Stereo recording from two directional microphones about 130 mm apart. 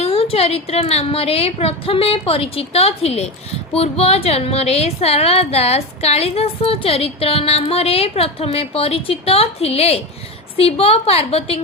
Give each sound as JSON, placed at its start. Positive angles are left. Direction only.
{"t": 0.0, "sound": "a woman's voice", "side_deg": 50}